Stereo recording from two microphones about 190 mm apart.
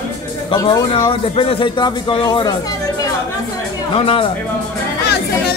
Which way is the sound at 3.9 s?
30° left (ahead or behind).